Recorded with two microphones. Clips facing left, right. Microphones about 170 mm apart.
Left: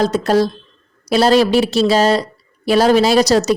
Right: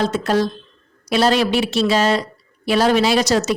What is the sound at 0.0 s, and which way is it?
A woman's voice, 40° left (ahead or behind).